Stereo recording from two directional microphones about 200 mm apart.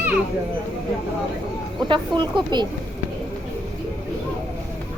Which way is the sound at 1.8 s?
20° right (ahead or behind).